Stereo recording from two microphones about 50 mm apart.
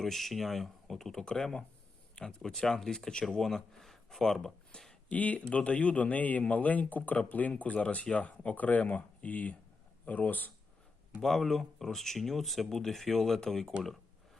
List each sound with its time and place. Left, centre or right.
0.0 s speech: centre
5.0 s speech: left
11.2 s speech: centre